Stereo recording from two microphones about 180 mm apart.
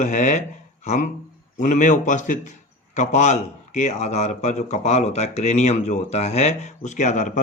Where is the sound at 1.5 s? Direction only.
40° left (ahead or behind).